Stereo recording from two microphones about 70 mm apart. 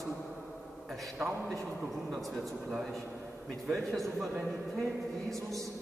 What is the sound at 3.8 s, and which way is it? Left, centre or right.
A man's voice, centre.